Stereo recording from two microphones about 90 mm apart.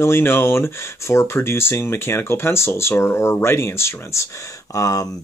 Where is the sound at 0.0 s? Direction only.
25° left (ahead or behind).